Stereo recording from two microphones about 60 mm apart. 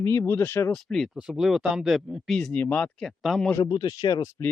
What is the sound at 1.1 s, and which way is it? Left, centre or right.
Speech, centre.